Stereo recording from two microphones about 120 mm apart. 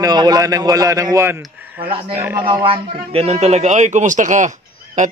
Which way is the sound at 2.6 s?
50° right (ahead or behind).